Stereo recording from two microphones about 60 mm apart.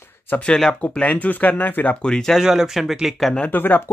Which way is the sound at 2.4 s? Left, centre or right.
Centre.